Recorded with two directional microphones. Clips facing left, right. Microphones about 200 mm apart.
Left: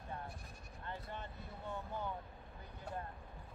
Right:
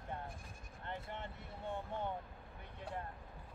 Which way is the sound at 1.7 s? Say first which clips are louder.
Right 2 dB; 25° right (ahead or behind).